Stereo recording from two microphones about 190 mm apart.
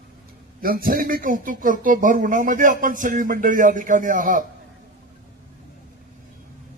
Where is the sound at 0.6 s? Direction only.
50° right (ahead or behind).